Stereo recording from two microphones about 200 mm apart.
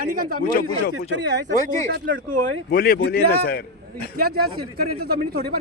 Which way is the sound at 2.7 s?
50° left (ahead or behind).